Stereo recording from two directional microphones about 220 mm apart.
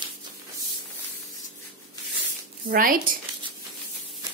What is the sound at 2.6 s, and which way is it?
Speech, 40° right (ahead or behind).